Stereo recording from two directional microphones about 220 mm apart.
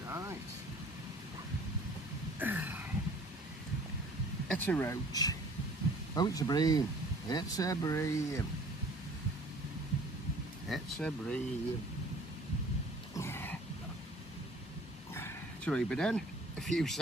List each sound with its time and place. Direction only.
0.1 s vehicle: 10° right (ahead or behind)
2.3 s a sound: 10° right (ahead or behind)
4.5 s speech: 10° left (ahead or behind)
10.7 s speech: 5° left (ahead or behind)
13.1 s throat clearing: 10° left (ahead or behind)
15.1 s a sound: 10° left (ahead or behind)
16.6 s speech: centre (ahead or behind)